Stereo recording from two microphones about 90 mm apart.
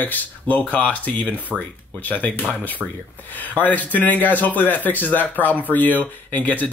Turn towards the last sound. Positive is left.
turn(degrees=15)  # may be behind; listen again after turning